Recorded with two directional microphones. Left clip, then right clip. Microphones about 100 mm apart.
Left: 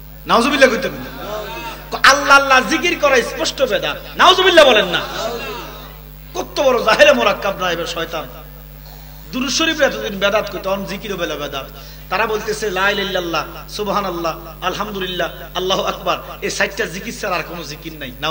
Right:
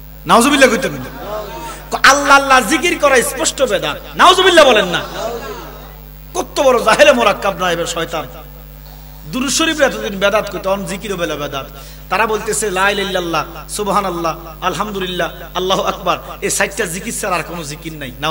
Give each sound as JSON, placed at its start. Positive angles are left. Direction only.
{"t": 0.3, "sound": "a man's voice", "side_deg": -55}
{"t": 6.3, "sound": "speech", "side_deg": -55}
{"t": 9.3, "sound": "a man's voice", "side_deg": -55}